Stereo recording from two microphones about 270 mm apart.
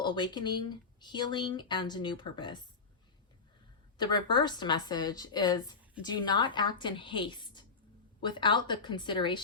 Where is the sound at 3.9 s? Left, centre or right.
Centre.